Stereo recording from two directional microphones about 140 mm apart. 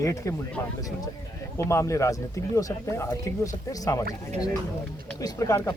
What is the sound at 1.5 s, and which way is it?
Speech, 20° left (ahead or behind).